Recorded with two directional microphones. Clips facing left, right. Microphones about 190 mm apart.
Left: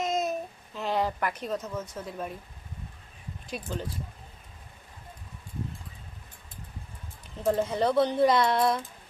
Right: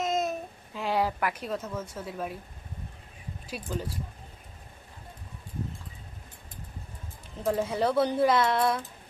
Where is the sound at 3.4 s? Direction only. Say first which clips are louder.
Even; 10° right (ahead or behind).